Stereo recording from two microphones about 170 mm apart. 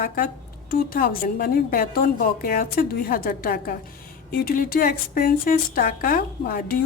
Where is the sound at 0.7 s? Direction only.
60° left (ahead or behind).